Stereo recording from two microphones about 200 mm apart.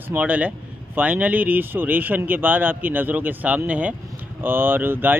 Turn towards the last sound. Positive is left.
turn(degrees=-10)  # may be behind; listen again after turning